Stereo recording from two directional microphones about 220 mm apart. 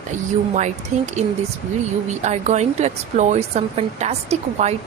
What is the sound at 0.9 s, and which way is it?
Speech, 30° right (ahead or behind).